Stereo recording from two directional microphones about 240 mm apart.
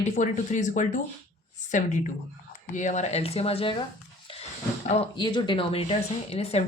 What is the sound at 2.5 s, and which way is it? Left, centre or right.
Speech, left.